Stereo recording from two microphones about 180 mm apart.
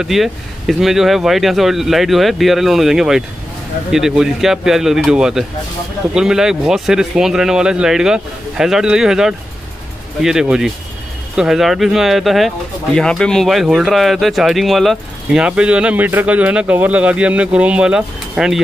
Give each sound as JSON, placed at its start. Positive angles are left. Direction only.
{"t": 0.0, "sound": "speech", "side_deg": 0}